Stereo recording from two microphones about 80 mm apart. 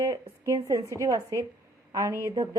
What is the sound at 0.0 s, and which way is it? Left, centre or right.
A woman's voice, right.